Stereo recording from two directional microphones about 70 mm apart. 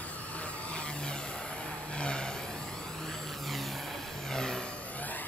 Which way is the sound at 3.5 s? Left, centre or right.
Centre.